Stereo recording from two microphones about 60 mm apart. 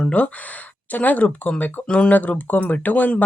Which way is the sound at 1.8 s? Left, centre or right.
Centre.